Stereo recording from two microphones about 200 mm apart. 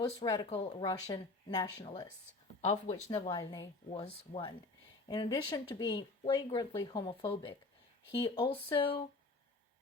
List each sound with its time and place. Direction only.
0.2 s speech: 20° left (ahead or behind)
0.6 s speech: 35° left (ahead or behind)
0.9 s speech: 20° left (ahead or behind)
2.6 s speech: 35° left (ahead or behind)
3.1 s speech: 20° left (ahead or behind)
3.8 s speech: 30° left (ahead or behind)